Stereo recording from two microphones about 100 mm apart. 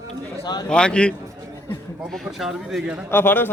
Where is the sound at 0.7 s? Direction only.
10° left (ahead or behind).